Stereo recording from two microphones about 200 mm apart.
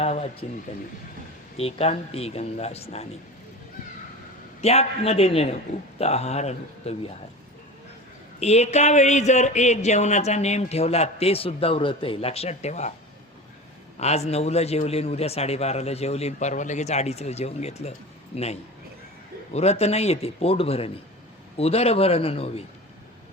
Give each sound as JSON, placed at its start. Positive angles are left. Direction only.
{"t": 0.0, "sound": "speech", "side_deg": 30}
{"t": 1.5, "sound": "speech", "side_deg": 30}
{"t": 4.6, "sound": "speech", "side_deg": 30}
{"t": 8.4, "sound": "speech", "side_deg": 35}
{"t": 14.0, "sound": "speech", "side_deg": 30}